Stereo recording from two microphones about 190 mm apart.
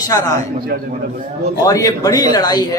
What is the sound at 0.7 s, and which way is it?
Speech, 60° right (ahead or behind).